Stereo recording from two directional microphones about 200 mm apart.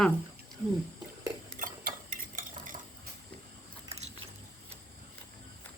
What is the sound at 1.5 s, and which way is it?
Cutlery, 45° right (ahead or behind).